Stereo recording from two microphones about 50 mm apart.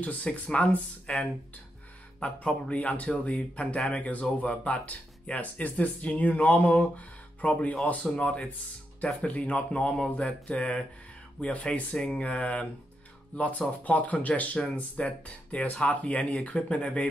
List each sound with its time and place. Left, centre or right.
0.0 s speech: left
2.2 s speech: left